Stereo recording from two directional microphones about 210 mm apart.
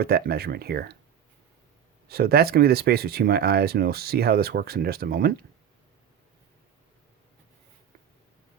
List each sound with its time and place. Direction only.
0.0 s speech: 45° right (ahead or behind)
2.0 s speech: 45° right (ahead or behind)